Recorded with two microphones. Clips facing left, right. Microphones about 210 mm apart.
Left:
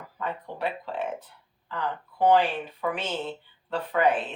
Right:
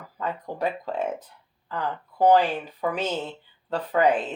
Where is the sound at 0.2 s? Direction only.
40° right (ahead or behind).